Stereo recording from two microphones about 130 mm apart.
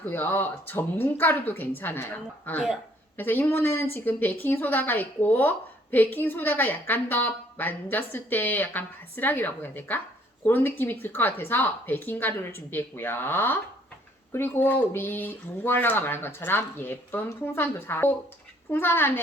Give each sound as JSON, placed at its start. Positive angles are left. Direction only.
{"t": 0.0, "sound": "speech", "side_deg": 15}